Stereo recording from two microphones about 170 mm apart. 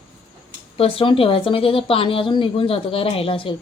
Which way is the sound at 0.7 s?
35° left (ahead or behind).